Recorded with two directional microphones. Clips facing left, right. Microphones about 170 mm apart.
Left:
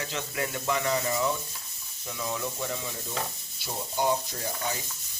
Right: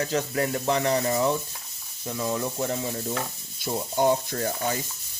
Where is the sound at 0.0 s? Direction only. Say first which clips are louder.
Right 7 dB; 40° right (ahead or behind).